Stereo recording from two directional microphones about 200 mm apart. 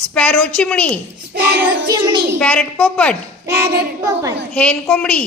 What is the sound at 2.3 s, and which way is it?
Speech, 5° left (ahead or behind).